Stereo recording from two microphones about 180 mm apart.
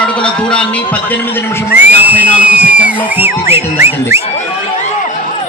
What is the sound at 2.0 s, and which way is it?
Music, 10° right (ahead or behind).